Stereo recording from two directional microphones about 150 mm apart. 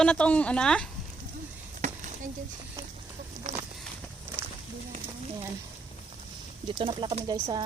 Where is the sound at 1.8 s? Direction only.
55° right (ahead or behind).